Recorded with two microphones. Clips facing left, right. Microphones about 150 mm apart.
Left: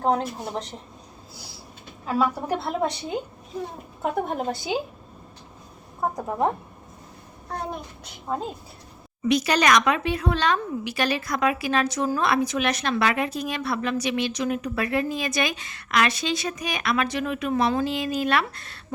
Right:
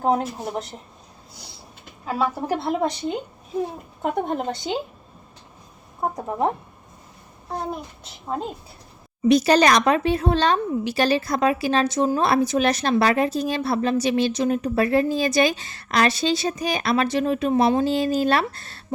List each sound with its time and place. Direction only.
0.0 s a woman's voice: 5° right (ahead or behind)
2.0 s a woman's voice: centre (ahead or behind)
6.1 s a woman's voice: 10° right (ahead or behind)
9.2 s speech: 35° right (ahead or behind)